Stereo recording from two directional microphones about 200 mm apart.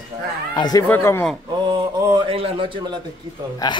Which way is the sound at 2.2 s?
30° right (ahead or behind).